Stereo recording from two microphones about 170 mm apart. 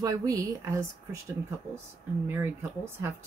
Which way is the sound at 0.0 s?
20° right (ahead or behind).